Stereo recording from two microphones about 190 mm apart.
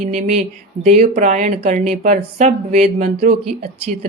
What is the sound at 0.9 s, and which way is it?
Speech, 35° right (ahead or behind).